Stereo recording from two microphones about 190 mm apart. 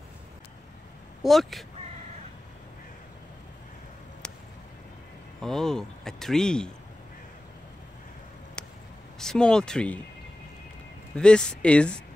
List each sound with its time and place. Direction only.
1.2 s speech: centre (ahead or behind)
5.4 s speech: centre (ahead or behind)
9.2 s speech: 5° left (ahead or behind)
11.1 s speech: 5° left (ahead or behind)